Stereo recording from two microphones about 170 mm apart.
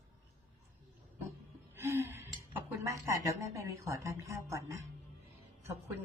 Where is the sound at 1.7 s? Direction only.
15° right (ahead or behind).